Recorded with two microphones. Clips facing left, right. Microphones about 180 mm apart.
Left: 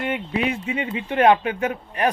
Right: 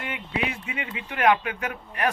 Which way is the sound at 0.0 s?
35° left (ahead or behind).